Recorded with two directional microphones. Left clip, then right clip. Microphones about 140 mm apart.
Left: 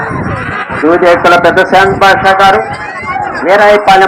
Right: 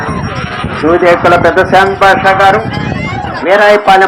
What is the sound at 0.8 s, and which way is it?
Speech, 20° left (ahead or behind).